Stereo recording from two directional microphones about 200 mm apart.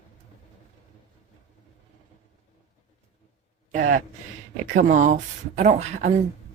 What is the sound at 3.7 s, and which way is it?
Speech, 40° right (ahead or behind).